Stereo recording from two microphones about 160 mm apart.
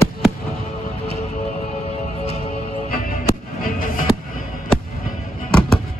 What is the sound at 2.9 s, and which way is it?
Music, 65° left (ahead or behind).